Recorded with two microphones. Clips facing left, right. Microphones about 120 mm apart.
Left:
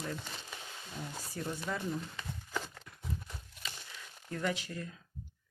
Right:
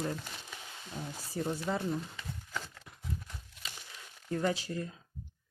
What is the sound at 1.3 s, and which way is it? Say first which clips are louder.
Speech: right 6 dB; 30° right (ahead or behind).